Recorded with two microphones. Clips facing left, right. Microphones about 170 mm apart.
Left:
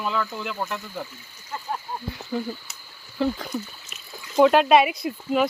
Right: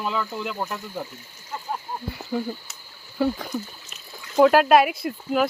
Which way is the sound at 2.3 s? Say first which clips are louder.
Right 1 dB; 15° right (ahead or behind).